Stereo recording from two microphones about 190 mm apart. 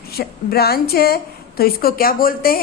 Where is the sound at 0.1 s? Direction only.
55° left (ahead or behind).